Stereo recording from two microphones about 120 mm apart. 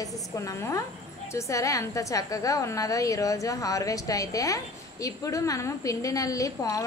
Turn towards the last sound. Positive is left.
turn(degrees=30)  # may be behind; listen again after turning